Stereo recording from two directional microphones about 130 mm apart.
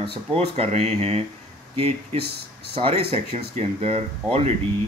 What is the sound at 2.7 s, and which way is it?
Speech, 45° right (ahead or behind).